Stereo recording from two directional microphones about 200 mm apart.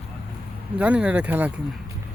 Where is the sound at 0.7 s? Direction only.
5° right (ahead or behind).